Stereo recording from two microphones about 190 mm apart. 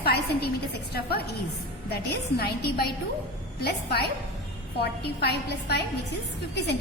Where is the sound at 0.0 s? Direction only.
55° left (ahead or behind).